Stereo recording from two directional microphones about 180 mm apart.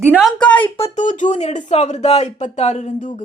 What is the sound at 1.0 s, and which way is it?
A woman's voice, 45° left (ahead or behind).